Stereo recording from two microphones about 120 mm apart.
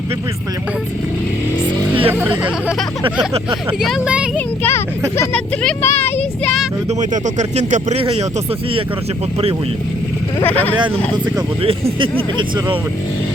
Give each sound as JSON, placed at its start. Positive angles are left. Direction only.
{"t": 2.0, "sound": "speech", "side_deg": -15}
{"t": 3.8, "sound": "speech", "side_deg": 0}
{"t": 4.4, "sound": "a sound", "side_deg": 15}
{"t": 5.8, "sound": "a sound", "side_deg": 20}
{"t": 7.0, "sound": "speech", "side_deg": -85}
{"t": 7.9, "sound": "speech", "side_deg": -55}
{"t": 10.4, "sound": "speech", "side_deg": 15}
{"t": 11.6, "sound": "speech", "side_deg": -50}